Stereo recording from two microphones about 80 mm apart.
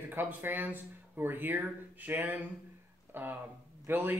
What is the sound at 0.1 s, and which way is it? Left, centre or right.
Speech, right.